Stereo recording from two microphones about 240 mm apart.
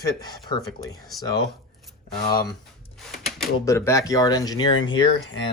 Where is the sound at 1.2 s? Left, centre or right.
Centre.